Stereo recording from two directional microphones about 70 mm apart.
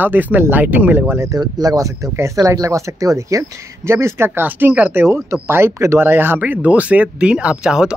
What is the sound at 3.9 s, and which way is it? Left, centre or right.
Speech, right.